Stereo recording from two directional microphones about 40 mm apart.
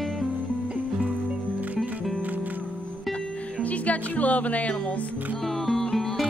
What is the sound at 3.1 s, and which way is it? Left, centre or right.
Music, left.